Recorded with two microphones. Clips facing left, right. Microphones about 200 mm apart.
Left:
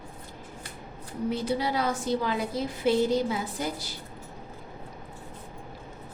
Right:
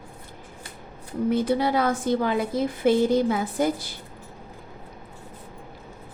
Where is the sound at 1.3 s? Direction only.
55° right (ahead or behind).